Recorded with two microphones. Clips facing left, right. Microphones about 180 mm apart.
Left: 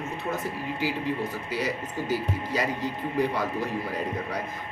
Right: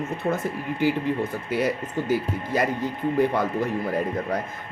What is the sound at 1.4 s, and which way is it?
Speech, 55° right (ahead or behind).